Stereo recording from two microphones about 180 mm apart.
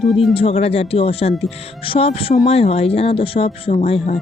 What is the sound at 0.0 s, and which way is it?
Speech, centre (ahead or behind).